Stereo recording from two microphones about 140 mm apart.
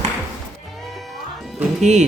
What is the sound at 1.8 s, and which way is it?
Music, 55° right (ahead or behind).